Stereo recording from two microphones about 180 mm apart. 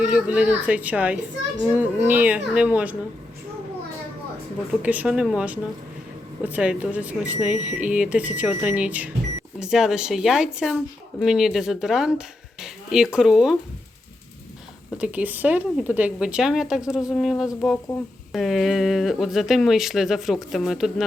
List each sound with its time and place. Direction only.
0.0 s speech: 5° right (ahead or behind)
4.7 s speech: 10° right (ahead or behind)
12.6 s a sound: 5° right (ahead or behind)
13.1 s speech: 5° right (ahead or behind)
14.9 s speech: 5° right (ahead or behind)